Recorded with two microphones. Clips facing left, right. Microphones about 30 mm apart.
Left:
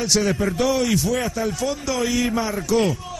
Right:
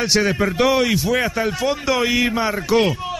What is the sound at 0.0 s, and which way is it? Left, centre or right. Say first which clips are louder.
A man's voice: right 2 dB; right.